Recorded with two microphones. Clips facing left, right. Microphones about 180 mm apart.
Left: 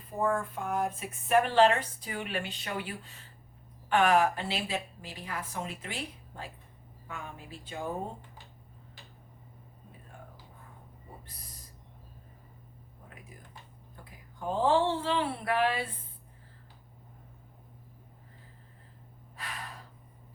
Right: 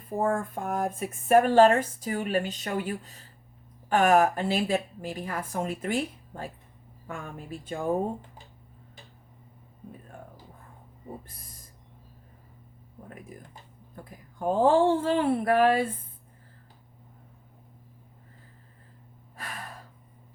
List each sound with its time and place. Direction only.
0.2 s speech: 45° right (ahead or behind)
13.9 s speech: 50° right (ahead or behind)
19.4 s gasp: 45° right (ahead or behind)